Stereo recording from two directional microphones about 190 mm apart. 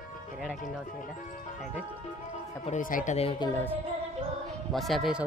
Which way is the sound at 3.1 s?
30° left (ahead or behind).